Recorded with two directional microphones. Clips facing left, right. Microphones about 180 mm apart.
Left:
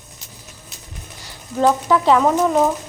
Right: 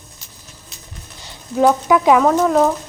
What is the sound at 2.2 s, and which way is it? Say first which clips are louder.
Speech: right 2 dB; 5° left (ahead or behind).